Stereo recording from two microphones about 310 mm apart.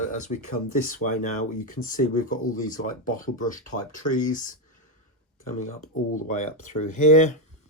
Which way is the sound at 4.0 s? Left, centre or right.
Left.